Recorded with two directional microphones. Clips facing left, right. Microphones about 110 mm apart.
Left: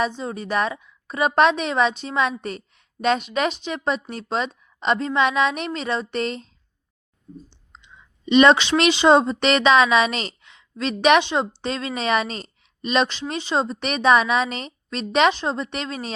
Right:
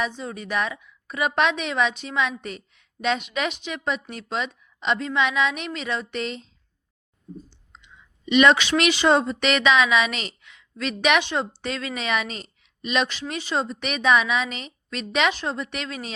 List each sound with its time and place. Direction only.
0.0 s a woman's voice: 35° left (ahead or behind)
7.7 s speech: 30° left (ahead or behind)
11.2 s a woman's voice: 20° left (ahead or behind)